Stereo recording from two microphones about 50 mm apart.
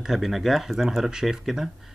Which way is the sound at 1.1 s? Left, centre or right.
Centre.